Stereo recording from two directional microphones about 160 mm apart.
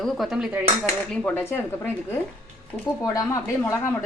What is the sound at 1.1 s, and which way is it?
Speech, 5° left (ahead or behind).